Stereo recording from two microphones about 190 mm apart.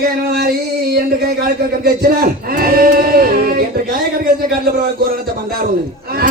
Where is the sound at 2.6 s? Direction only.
50° right (ahead or behind).